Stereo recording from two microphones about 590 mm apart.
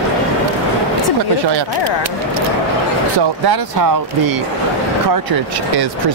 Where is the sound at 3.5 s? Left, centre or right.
Right.